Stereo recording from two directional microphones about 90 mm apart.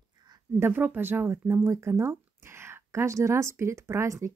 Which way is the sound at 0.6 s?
20° right (ahead or behind).